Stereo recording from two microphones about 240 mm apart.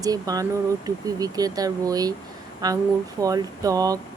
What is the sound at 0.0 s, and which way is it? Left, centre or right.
Speech, centre.